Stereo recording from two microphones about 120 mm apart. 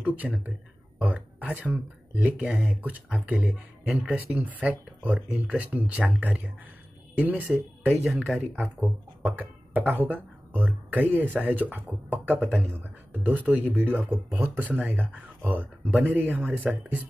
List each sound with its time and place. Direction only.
0.0 s speech: 10° right (ahead or behind)
7.9 s speech: 5° right (ahead or behind)
9.2 s speech: 15° right (ahead or behind)
12.4 s speech: centre (ahead or behind)
13.2 s speech: 15° right (ahead or behind)